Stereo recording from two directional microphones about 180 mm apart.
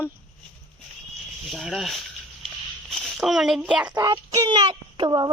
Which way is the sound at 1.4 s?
Centre (ahead or behind).